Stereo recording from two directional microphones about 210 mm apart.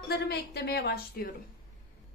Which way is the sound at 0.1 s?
50° left (ahead or behind).